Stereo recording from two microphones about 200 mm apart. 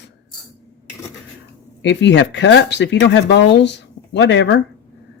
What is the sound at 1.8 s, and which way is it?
Speech, 65° left (ahead or behind).